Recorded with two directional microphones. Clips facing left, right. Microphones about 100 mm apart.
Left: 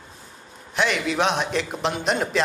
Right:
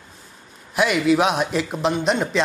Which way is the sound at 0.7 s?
5° right (ahead or behind).